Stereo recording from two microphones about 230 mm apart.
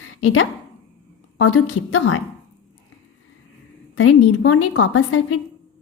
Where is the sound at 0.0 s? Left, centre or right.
Left.